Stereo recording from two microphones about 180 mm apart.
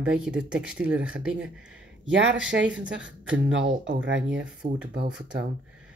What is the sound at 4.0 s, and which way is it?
Speech, 90° right.